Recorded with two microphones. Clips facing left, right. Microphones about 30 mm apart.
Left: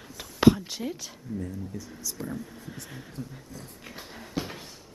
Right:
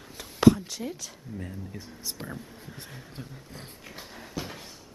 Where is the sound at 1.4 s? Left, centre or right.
Right.